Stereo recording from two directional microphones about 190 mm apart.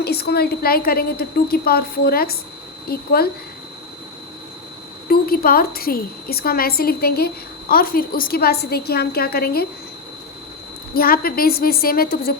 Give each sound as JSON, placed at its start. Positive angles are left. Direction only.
{"t": 0.0, "sound": "a woman's voice", "side_deg": 55}
{"t": 5.0, "sound": "a woman's voice", "side_deg": 50}
{"t": 10.9, "sound": "a woman's voice", "side_deg": 50}